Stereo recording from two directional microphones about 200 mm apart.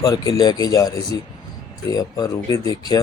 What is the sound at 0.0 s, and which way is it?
Speech, 20° left (ahead or behind).